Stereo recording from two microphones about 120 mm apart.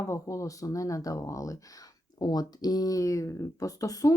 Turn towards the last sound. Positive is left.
turn(degrees=30)  # may be behind; listen again after turning